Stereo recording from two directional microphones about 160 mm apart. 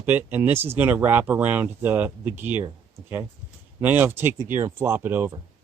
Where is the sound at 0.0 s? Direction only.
10° right (ahead or behind).